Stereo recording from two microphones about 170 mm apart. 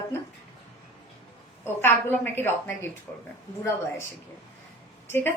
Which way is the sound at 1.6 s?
15° left (ahead or behind).